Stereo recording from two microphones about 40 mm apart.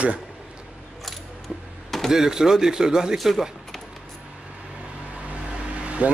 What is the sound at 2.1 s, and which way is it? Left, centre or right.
Speech, centre.